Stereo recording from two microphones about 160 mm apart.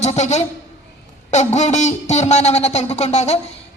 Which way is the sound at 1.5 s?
45° left (ahead or behind).